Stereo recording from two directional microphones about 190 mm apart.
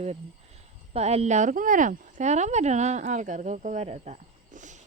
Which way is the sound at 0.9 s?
35° right (ahead or behind).